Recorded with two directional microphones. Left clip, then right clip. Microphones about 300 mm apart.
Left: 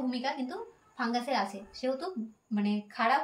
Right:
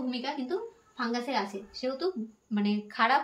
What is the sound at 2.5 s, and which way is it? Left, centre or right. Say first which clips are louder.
Speech: right 2 dB; centre.